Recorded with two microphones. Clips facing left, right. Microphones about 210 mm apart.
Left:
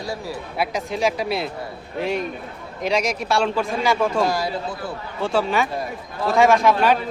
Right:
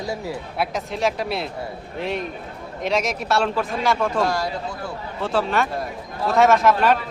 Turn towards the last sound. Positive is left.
turn(degrees=0)  # may be behind; listen again after turning